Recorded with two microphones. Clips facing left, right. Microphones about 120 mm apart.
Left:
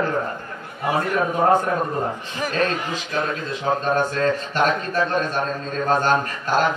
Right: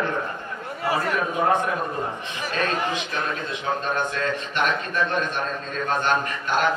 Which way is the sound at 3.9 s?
35° left (ahead or behind).